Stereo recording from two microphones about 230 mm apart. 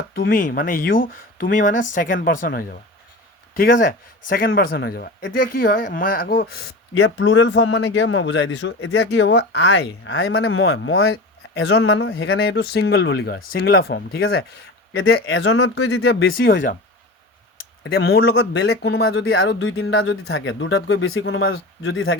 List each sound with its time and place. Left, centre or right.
0.1 s speech: left
11.5 s speech: left
14.9 s speech: left
16.4 s speech: left
17.8 s speech: left